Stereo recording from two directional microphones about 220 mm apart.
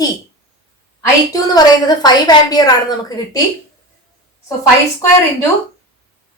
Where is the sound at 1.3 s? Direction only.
15° left (ahead or behind).